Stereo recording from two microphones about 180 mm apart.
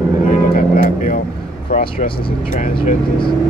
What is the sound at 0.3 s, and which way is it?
Vehicle, 50° left (ahead or behind).